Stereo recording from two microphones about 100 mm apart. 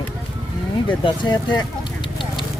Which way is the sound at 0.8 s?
55° left (ahead or behind).